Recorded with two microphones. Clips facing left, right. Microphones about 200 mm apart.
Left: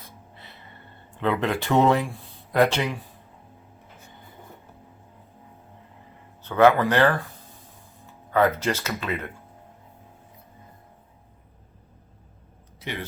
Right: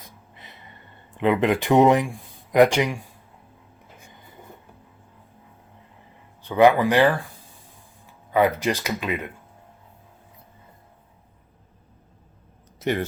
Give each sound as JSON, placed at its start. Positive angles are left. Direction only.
{"t": 1.1, "sound": "speech", "side_deg": -15}
{"t": 6.4, "sound": "speech", "side_deg": -15}
{"t": 8.3, "sound": "speech", "side_deg": -15}
{"t": 12.8, "sound": "speech", "side_deg": -45}